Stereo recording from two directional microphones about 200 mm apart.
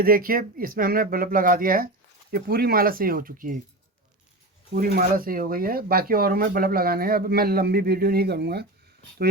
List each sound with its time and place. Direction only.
0.0 s speech: 45° right (ahead or behind)
4.7 s speech: 45° right (ahead or behind)